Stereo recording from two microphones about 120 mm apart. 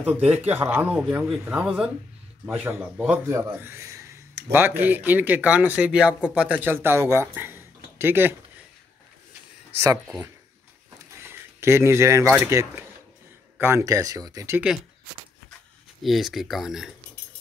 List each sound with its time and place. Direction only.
0.0 s speech: 15° right (ahead or behind)
7.3 s a sound: 20° right (ahead or behind)
11.2 s speech: 20° right (ahead or behind)
16.0 s speech: centre (ahead or behind)